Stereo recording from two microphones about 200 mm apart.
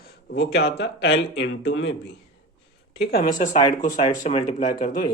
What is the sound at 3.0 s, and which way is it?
Speech, 50° left (ahead or behind).